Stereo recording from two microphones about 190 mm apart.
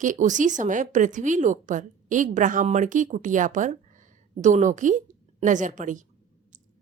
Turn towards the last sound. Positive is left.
turn(degrees=-40)  # may be behind; listen again after turning